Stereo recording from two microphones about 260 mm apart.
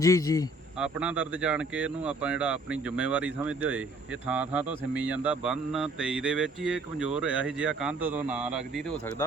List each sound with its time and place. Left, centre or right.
0.0 s speech: centre
0.8 s speech: centre